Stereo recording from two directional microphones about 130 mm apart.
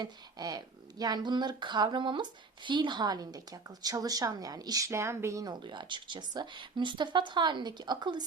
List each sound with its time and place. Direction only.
0.0 s a woman's voice: 30° right (ahead or behind)